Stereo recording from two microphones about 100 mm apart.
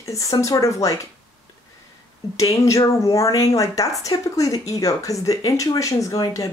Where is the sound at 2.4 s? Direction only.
35° left (ahead or behind).